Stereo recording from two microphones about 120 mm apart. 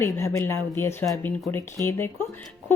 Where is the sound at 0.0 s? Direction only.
20° left (ahead or behind).